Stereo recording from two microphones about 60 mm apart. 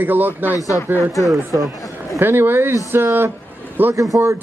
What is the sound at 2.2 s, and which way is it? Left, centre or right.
Speech, right.